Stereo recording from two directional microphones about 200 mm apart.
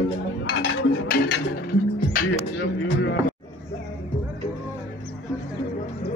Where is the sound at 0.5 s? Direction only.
50° left (ahead or behind).